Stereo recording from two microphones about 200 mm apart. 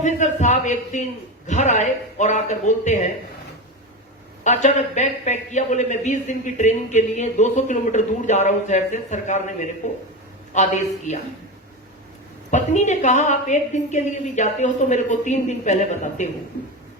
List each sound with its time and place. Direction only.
0.0 s a man's voice: 35° left (ahead or behind)
4.4 s a man's voice: 35° left (ahead or behind)
12.5 s a man's voice: 35° left (ahead or behind)